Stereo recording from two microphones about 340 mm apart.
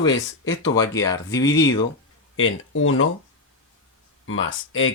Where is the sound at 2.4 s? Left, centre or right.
Left.